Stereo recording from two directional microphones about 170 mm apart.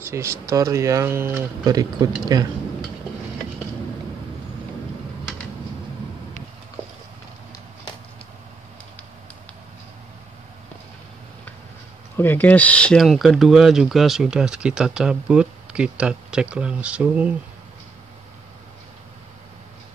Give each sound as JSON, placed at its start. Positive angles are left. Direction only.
{"t": 0.0, "sound": "speech", "side_deg": -15}
{"t": 12.2, "sound": "speech", "side_deg": 10}